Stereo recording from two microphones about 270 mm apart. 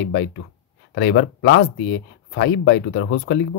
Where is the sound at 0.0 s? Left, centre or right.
Left.